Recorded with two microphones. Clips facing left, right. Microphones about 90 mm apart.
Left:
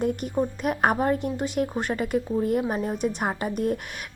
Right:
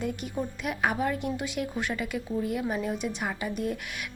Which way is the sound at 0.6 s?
45° left (ahead or behind).